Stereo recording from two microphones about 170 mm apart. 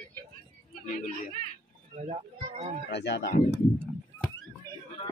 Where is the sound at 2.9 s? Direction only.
85° left.